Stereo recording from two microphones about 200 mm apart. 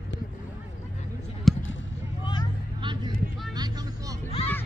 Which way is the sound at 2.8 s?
25° right (ahead or behind).